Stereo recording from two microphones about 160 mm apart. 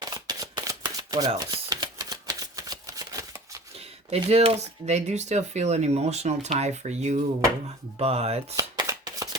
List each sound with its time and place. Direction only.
0.0 s shuffling cards: 25° right (ahead or behind)
1.3 s a sound: 25° right (ahead or behind)
4.1 s speech: 40° right (ahead or behind)
8.5 s shuffling cards: 20° right (ahead or behind)